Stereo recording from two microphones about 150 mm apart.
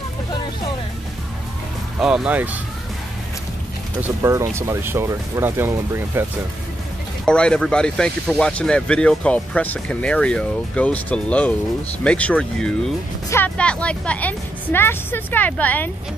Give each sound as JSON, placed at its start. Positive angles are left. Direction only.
{"t": 2.0, "sound": "speech", "side_deg": -5}
{"t": 4.0, "sound": "speech", "side_deg": -20}
{"t": 7.2, "sound": "speech", "side_deg": 5}